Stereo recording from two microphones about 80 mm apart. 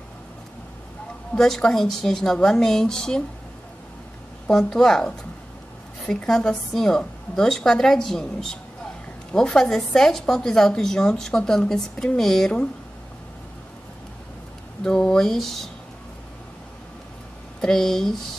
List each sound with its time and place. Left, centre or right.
1.3 s a woman's voice: centre
4.5 s a woman's voice: centre
14.8 s a woman's voice: centre
17.6 s a woman's voice: centre